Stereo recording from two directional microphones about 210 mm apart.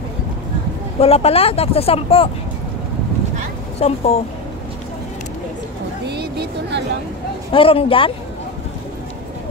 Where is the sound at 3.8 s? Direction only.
30° left (ahead or behind).